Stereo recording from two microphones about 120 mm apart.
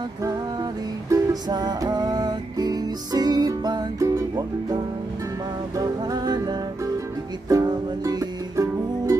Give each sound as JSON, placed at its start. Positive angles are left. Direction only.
{"t": 1.1, "sound": "music", "side_deg": -35}
{"t": 6.0, "sound": "music", "side_deg": -35}